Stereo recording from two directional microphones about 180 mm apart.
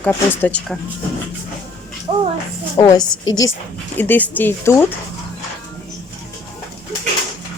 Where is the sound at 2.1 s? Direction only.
30° right (ahead or behind).